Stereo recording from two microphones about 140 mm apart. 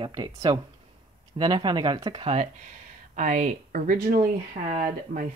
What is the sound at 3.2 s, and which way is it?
Speech, 65° right (ahead or behind).